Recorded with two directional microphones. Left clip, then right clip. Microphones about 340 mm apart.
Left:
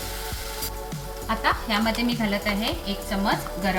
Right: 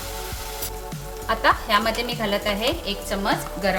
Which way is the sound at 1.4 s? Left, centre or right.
Right.